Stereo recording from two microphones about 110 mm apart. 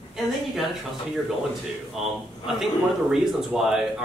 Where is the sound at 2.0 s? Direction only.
5° right (ahead or behind).